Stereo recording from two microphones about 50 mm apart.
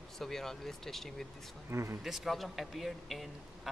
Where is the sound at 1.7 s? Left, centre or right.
Right.